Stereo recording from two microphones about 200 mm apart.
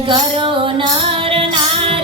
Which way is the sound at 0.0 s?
25° right (ahead or behind).